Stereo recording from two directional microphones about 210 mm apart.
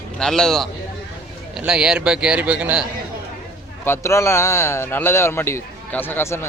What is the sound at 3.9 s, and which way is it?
A man's voice, 15° left (ahead or behind).